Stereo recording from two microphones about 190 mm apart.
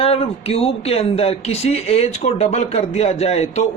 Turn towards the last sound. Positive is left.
turn(degrees=35)  # may be behind; listen again after turning